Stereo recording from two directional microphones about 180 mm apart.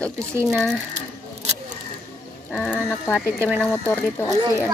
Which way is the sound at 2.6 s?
5° left (ahead or behind).